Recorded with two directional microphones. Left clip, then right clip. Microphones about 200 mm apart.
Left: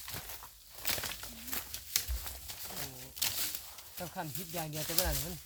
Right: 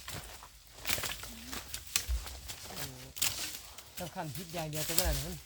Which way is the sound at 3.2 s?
30° right (ahead or behind).